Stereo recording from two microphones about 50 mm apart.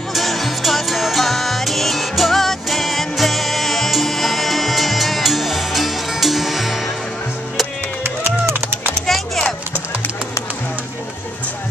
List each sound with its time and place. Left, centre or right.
0.1 s music: centre
8.0 s a sound: right
9.0 s music: centre